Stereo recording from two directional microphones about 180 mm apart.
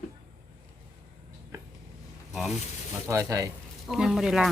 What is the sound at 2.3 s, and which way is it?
Snake, centre (ahead or behind).